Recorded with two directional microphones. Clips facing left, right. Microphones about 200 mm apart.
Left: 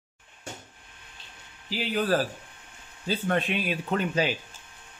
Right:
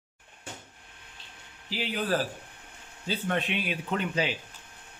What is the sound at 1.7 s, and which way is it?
Speech, 40° left (ahead or behind).